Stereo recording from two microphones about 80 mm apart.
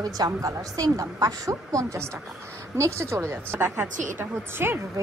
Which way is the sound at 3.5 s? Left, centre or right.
Right.